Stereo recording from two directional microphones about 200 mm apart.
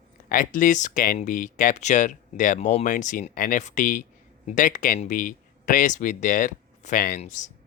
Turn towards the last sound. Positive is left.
turn(degrees=40)  # may be behind; listen again after turning